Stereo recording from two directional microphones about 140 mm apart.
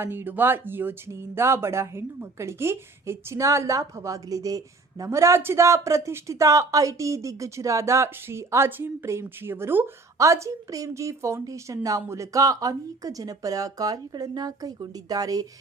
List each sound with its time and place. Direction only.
0.0 s a woman's voice: 15° right (ahead or behind)